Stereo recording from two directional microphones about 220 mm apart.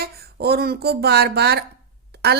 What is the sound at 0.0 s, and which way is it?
A woman's voice, 45° right (ahead or behind).